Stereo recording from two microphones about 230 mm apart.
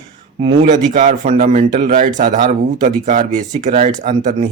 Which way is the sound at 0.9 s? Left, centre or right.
Right.